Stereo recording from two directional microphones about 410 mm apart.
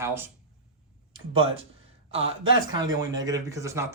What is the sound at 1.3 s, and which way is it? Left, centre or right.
Speech, centre.